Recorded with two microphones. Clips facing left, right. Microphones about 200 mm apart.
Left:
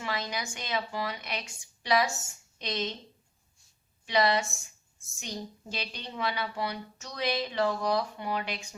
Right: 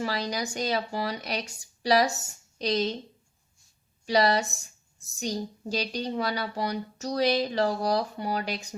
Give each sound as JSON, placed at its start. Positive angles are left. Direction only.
{"t": 0.0, "sound": "a woman's voice", "side_deg": -35}
{"t": 4.0, "sound": "a woman's voice", "side_deg": -35}